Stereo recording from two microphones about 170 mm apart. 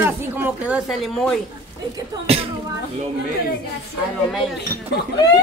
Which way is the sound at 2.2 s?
35° right (ahead or behind).